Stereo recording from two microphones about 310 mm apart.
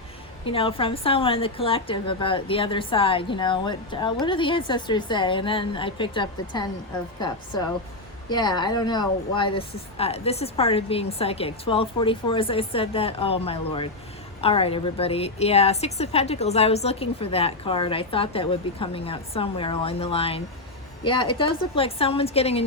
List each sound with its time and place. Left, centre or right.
0.4 s a woman's voice: centre
8.3 s a woman's voice: centre